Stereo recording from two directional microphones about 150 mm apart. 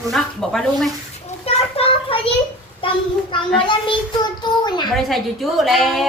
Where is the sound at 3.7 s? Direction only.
30° left (ahead or behind).